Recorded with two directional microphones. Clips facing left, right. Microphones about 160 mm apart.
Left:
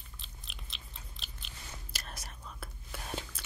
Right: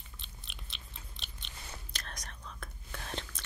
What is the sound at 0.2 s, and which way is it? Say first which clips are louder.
Chewing: left 1 dB; centre (ahead or behind).